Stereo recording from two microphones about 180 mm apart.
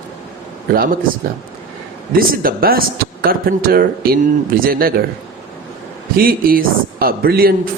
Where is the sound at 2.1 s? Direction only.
55° right (ahead or behind).